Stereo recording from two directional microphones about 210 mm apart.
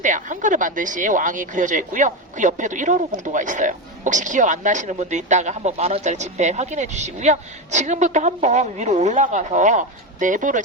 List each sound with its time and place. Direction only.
0.0 s speech: 35° right (ahead or behind)